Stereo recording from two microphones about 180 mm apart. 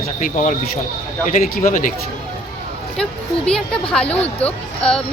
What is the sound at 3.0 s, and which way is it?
A child's voice, 5° left (ahead or behind).